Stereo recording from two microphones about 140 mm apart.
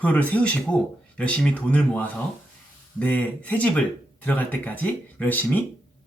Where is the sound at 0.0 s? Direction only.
10° left (ahead or behind).